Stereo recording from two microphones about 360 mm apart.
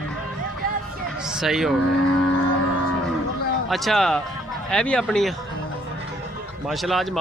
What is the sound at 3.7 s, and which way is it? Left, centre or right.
Speech, centre.